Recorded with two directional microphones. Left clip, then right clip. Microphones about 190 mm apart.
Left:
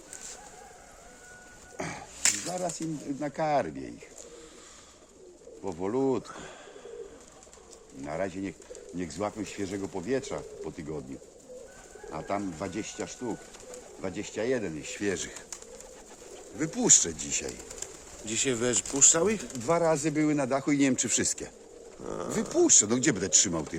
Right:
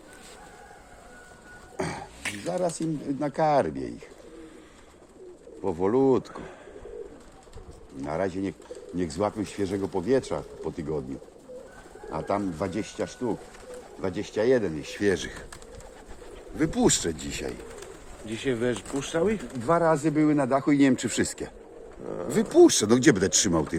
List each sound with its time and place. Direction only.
1.7 s a sound: 65° right (ahead or behind)
2.5 s speech: 60° right (ahead or behind)
5.6 s speech: 60° right (ahead or behind)
8.0 s speech: 55° right (ahead or behind)
12.1 s speech: 60° right (ahead or behind)
16.6 s speech: 35° right (ahead or behind); by 17.5 s 15° right (ahead or behind)
18.3 s speech: 20° left (ahead or behind)
19.6 s speech: centre (ahead or behind)
22.0 s speech: 20° left (ahead or behind)
22.4 s speech: 45° right (ahead or behind); by 23.6 s 70° right (ahead or behind)